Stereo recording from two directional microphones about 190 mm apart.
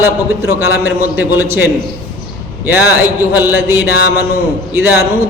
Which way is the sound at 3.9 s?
55° left (ahead or behind).